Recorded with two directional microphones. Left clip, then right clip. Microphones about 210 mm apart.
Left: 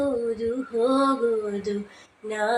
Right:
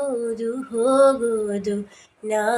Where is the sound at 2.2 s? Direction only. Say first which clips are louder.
Right 5 dB; 55° right (ahead or behind).